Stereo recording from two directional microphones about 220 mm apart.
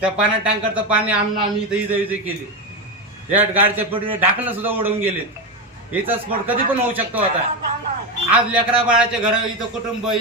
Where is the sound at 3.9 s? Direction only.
25° right (ahead or behind).